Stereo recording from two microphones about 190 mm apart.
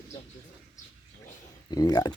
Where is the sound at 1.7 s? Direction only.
20° left (ahead or behind).